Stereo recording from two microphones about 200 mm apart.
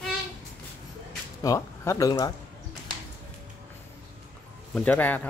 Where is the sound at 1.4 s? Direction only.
15° left (ahead or behind).